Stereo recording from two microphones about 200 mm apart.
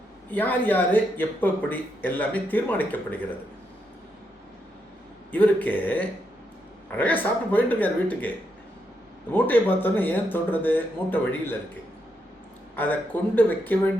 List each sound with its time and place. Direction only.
0.3 s speech: 10° left (ahead or behind)
5.3 s speech: 10° left (ahead or behind)
9.3 s speech: 10° left (ahead or behind)
12.7 s speech: 10° left (ahead or behind)